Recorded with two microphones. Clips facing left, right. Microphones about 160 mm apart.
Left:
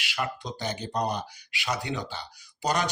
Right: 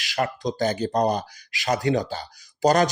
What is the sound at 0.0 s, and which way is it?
Speech, 40° right (ahead or behind).